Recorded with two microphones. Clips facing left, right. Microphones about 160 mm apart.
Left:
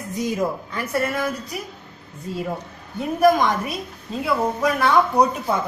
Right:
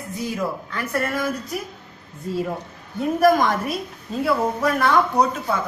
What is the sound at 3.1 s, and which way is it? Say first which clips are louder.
A woman's voice: left 1 dB; centre (ahead or behind).